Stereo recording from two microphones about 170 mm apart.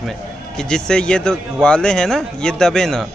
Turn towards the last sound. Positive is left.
turn(degrees=5)  # may be behind; listen again after turning